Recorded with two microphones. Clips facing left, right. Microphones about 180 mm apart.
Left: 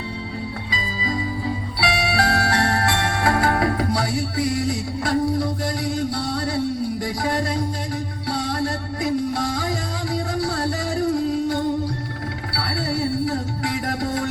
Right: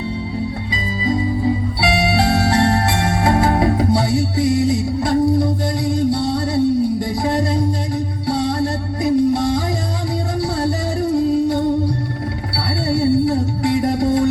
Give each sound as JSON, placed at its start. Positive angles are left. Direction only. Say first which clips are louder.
{"t": 1.8, "sound": "music", "louder": "right 3 dB", "side_deg": -25}